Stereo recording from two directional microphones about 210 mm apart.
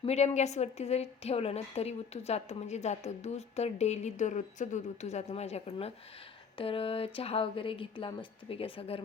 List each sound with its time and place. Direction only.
0.0 s a woman's voice: 30° left (ahead or behind)